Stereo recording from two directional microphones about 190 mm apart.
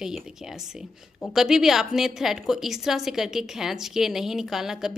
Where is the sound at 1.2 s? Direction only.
Centre (ahead or behind).